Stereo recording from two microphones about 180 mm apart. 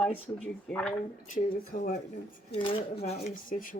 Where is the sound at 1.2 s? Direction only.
45° left (ahead or behind).